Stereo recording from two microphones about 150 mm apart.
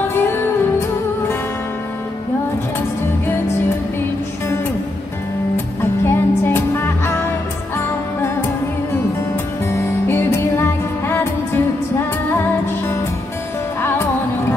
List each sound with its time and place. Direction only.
0.1 s music: 15° left (ahead or behind)
5.8 s music: 15° left (ahead or behind)
9.7 s music: 15° left (ahead or behind)
13.7 s music: 15° left (ahead or behind)